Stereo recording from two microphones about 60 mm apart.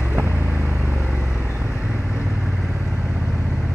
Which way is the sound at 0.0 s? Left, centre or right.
Right.